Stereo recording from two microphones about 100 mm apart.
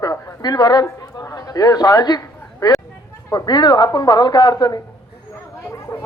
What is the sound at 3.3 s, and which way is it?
A woman's voice, 40° left (ahead or behind).